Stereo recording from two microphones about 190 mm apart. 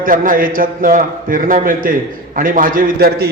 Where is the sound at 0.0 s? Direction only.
45° right (ahead or behind).